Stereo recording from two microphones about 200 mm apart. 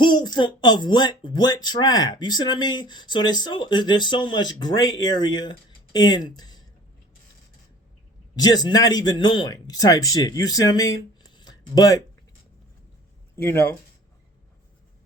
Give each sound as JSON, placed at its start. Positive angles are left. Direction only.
{"t": 0.0, "sound": "speech", "side_deg": 20}
{"t": 8.4, "sound": "speech", "side_deg": 20}
{"t": 13.3, "sound": "speech", "side_deg": 10}